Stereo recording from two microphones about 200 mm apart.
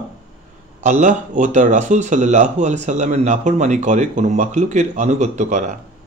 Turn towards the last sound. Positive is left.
turn(degrees=-35)  # may be behind; listen again after turning